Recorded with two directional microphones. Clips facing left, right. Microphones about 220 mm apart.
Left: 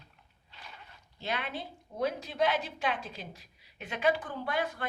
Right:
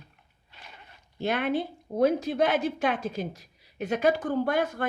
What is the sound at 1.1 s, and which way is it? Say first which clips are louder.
A woman's voice: right 10 dB; 50° right (ahead or behind).